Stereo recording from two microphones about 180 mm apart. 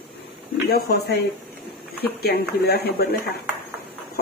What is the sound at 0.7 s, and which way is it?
Speech, 60° left (ahead or behind).